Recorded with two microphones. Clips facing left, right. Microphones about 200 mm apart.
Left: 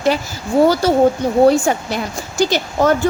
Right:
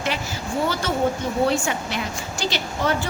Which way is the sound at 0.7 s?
35° left (ahead or behind).